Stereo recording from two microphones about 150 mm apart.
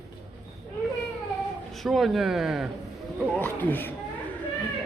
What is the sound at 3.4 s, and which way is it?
Speech, 15° left (ahead or behind).